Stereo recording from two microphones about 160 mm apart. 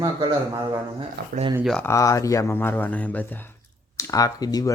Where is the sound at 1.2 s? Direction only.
85° right.